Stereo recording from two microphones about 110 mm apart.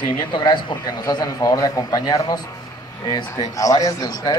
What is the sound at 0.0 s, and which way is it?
A man's voice, 45° left (ahead or behind).